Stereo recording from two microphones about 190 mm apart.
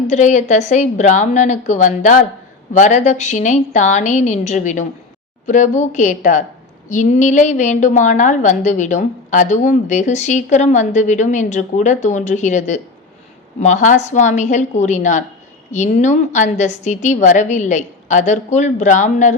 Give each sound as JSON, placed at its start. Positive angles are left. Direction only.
{"t": 0.1, "sound": "a woman's voice", "side_deg": 40}